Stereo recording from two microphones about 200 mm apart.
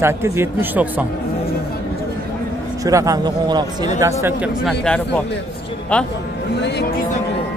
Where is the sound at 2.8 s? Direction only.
15° right (ahead or behind).